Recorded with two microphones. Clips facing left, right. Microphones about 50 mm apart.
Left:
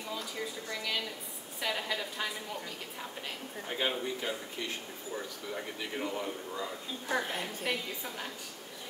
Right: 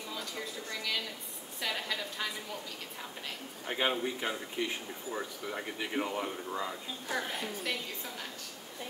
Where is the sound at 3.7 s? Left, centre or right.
Centre.